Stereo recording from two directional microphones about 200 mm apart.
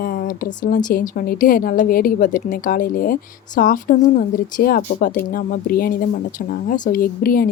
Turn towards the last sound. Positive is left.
turn(degrees=45)  # may be behind; listen again after turning